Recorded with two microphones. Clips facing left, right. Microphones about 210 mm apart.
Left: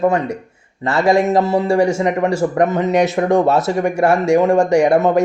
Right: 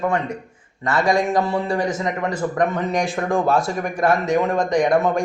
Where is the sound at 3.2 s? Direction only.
15° left (ahead or behind).